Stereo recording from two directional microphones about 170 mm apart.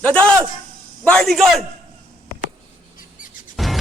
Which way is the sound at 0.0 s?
5° left (ahead or behind).